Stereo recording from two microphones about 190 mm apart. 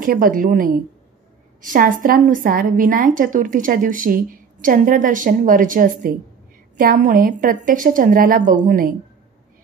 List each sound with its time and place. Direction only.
0.0 s a woman's voice: 45° right (ahead or behind)